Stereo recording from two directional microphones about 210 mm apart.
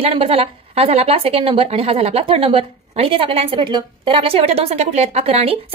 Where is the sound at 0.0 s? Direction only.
30° right (ahead or behind).